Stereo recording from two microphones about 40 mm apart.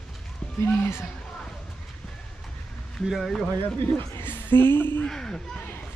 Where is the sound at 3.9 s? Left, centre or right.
Left.